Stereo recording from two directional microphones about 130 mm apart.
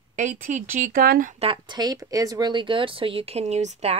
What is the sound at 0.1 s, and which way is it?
Speech, 65° right (ahead or behind).